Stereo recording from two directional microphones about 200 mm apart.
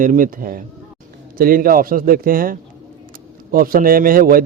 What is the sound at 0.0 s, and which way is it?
A man's voice, 40° right (ahead or behind).